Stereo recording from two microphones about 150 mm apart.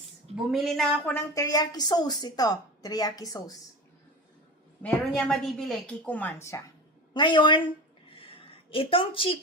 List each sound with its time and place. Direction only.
0.5 s a woman's voice: centre (ahead or behind)
1.3 s speech: 25° left (ahead or behind)
4.8 s a woman's voice: 5° left (ahead or behind)
7.1 s a woman's voice: 30° left (ahead or behind)
8.1 s a sound: 35° left (ahead or behind)